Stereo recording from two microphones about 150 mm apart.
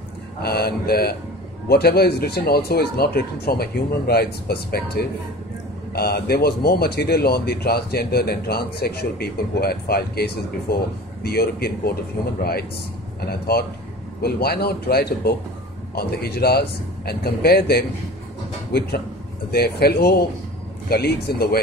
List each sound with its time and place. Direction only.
0.4 s speech: 90° left
13.3 s a man's voice: 90° left